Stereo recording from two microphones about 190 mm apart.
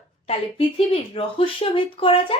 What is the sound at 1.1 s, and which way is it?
Speech, 30° left (ahead or behind).